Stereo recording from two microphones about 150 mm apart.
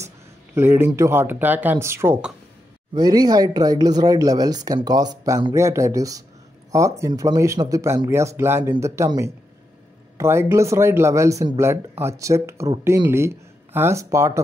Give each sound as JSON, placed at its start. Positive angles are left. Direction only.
{"t": 0.6, "sound": "speech", "side_deg": -15}